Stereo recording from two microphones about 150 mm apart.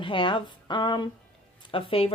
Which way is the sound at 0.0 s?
35° left (ahead or behind).